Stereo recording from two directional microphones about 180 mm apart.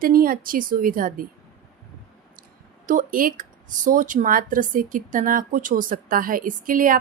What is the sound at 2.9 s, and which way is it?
Speech, 50° right (ahead or behind).